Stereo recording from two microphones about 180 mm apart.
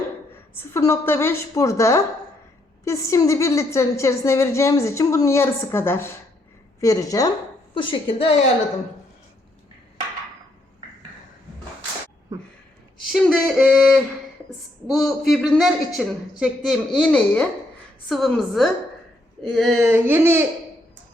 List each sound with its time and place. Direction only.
0.5 s a woman's voice: 15° left (ahead or behind); by 8.4 s 30° left (ahead or behind)
13.1 s a man's voice: centre (ahead or behind); by 20.4 s 15° right (ahead or behind)